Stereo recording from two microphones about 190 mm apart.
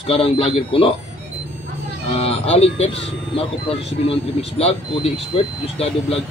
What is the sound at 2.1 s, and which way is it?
Speech, 30° left (ahead or behind).